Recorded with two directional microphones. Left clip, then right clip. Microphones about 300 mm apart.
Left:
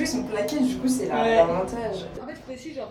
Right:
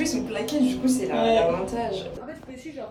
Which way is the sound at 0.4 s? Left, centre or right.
Centre.